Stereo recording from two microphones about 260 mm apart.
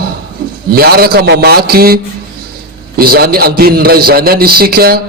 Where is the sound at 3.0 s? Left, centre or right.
Right.